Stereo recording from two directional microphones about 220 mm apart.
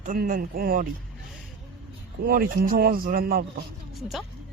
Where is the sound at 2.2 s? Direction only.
40° right (ahead or behind).